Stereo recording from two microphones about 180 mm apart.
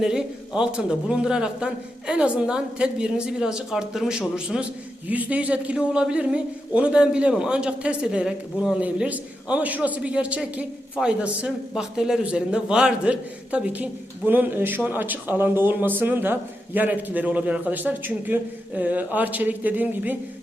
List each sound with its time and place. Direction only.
0.0 s a man's voice: 5° right (ahead or behind)